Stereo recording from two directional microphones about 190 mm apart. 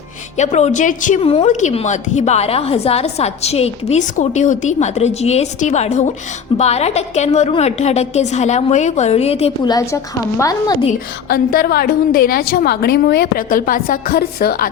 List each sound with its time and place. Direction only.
0.3 s speech: 35° left (ahead or behind)
9.6 s a woman's voice: 15° left (ahead or behind)
11.3 s a woman's voice: 50° left (ahead or behind)